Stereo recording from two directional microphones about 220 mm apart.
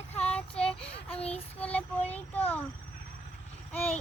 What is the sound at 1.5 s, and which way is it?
Child singing, 5° left (ahead or behind).